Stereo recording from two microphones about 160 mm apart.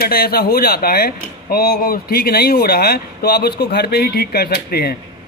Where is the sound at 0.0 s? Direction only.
70° left (ahead or behind).